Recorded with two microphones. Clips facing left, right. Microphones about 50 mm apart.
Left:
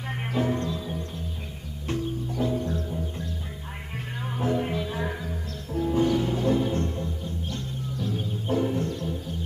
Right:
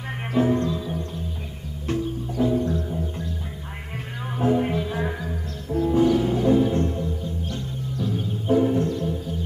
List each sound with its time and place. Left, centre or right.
0.3 s music: centre
2.3 s music: centre
2.6 s music: right
4.3 s music: centre
8.7 s music: right